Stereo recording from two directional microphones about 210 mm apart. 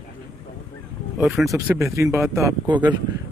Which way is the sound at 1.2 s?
Centre (ahead or behind).